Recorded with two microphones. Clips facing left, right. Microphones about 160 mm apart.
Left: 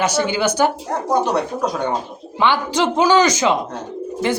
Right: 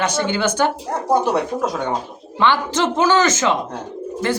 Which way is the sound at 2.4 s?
15° left (ahead or behind).